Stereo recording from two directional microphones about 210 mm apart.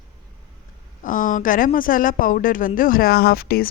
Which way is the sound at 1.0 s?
40° left (ahead or behind).